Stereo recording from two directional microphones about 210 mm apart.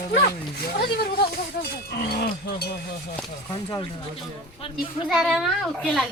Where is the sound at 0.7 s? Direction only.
50° left (ahead or behind).